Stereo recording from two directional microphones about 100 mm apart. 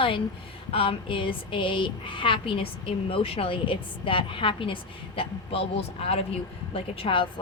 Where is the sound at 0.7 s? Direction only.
65° left (ahead or behind).